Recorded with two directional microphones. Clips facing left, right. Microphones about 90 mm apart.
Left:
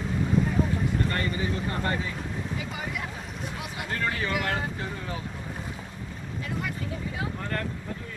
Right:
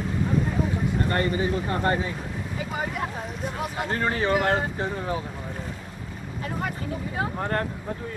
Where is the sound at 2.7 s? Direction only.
40° right (ahead or behind).